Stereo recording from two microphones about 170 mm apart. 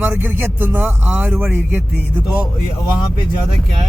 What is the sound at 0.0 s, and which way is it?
Speech, 10° right (ahead or behind).